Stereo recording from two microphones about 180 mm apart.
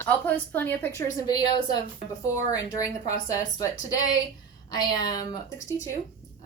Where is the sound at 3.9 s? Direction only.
20° left (ahead or behind).